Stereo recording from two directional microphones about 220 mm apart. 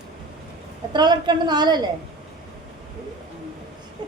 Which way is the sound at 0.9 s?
20° right (ahead or behind).